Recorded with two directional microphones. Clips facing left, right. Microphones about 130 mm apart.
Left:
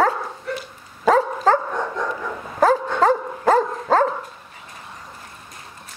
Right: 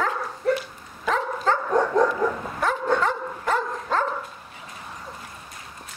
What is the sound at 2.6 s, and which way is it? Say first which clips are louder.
Dog: left 6 dB; 40° left (ahead or behind).